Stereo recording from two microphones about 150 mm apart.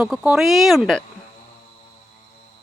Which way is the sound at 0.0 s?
5° right (ahead or behind).